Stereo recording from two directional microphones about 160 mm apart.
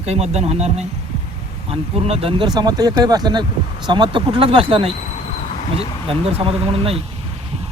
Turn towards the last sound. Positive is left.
turn(degrees=-35)  # may be behind; listen again after turning